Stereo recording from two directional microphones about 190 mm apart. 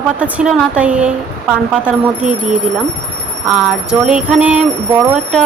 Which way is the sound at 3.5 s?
5° right (ahead or behind).